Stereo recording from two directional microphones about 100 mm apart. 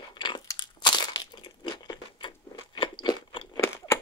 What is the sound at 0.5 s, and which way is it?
Crushing, 50° left (ahead or behind).